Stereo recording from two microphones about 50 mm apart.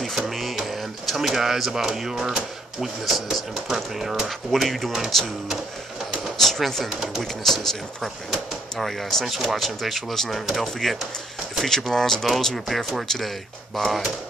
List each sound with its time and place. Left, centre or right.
0.1 s speech: centre
6.4 s speech: centre